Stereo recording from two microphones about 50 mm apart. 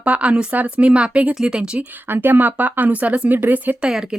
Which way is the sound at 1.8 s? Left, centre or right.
Right.